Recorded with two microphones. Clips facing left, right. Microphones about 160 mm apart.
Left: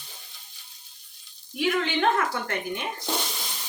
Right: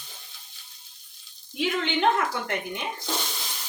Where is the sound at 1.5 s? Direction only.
25° right (ahead or behind).